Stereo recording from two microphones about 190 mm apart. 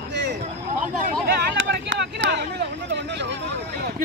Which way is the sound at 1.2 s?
60° right (ahead or behind).